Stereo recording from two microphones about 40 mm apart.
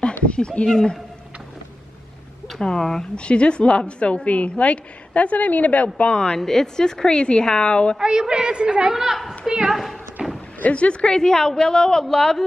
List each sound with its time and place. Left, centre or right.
0.2 s speech: left
0.7 s a woman's voice: centre
2.6 s a woman's voice: centre
3.2 s a woman's voice: left
6.1 s a woman's voice: left
8.0 s a woman's voice: centre
8.9 s a woman's voice: centre
10.2 s a sound: right
10.6 s a woman's voice: left; by 12.4 s centre